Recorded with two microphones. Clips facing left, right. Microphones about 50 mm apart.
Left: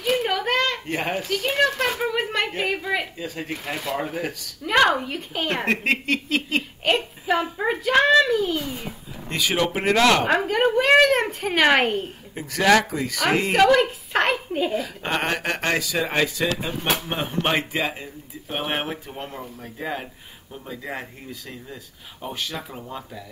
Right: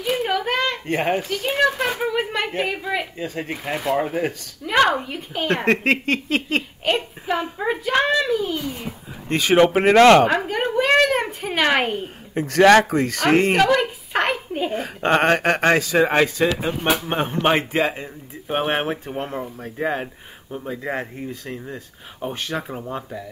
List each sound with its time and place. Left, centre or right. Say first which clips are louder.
0.0 s a sound: right 1 dB; centre
0.8 s speech: right 5 dB; right
1.3 s a child's voice: right 1 dB; centre
3.3 s speech: right 3 dB; centre
4.1 s speech: right 5 dB; right
4.6 s a child's voice: right 1 dB; centre
5.9 s speech: right 3 dB; right
6.8 s a child's voice: even; centre
9.3 s speech: right 7 dB; right
10.2 s a child's voice: even; centre
12.4 s speech: right 5 dB; right
13.6 s a sound: left 1 dB; centre
14.8 s speech: right 7 dB; right
18.8 s speech: right 5 dB; right